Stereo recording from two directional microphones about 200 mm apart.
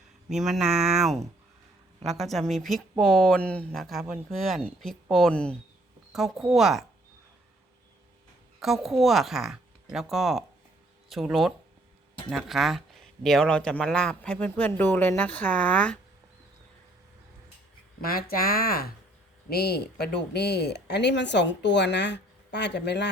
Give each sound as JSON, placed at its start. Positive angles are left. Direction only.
{"t": 0.3, "sound": "speech", "side_deg": 0}
{"t": 8.6, "sound": "speech", "side_deg": 0}
{"t": 18.0, "sound": "speech", "side_deg": 45}